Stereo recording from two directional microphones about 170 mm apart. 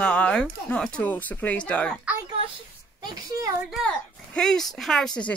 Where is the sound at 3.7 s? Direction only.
5° left (ahead or behind).